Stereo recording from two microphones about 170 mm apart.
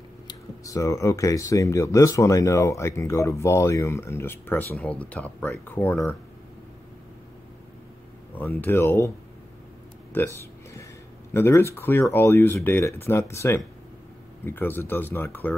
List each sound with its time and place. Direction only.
0.3 s speech: 20° left (ahead or behind)
8.4 s speech: 10° left (ahead or behind)
10.1 s a sound: 15° left (ahead or behind)
11.3 s speech: 15° left (ahead or behind)